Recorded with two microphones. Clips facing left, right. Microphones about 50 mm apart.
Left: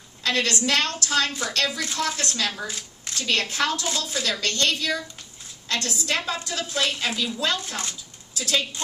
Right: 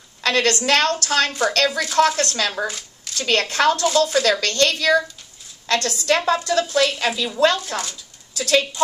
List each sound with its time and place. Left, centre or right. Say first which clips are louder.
0.2 s a woman's voice: right 5 dB; right
7.3 s a woman's voice: right 8 dB; right